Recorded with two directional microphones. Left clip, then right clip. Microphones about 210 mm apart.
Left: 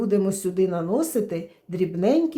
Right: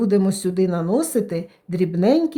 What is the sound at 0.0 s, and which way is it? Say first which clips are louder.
Speech: right 3 dB; 35° right (ahead or behind).